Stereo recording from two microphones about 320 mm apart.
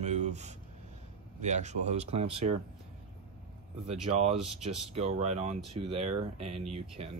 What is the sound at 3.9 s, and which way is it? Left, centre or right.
Speech, centre.